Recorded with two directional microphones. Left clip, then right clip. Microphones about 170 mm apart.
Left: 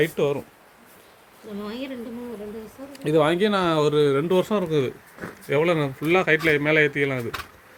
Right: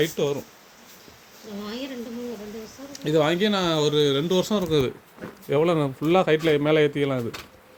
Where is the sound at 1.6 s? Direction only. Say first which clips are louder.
Even; 55° left (ahead or behind).